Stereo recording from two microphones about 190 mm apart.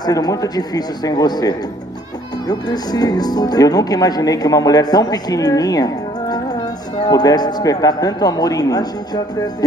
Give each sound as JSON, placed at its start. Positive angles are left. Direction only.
{"t": 0.0, "sound": "speech", "side_deg": 20}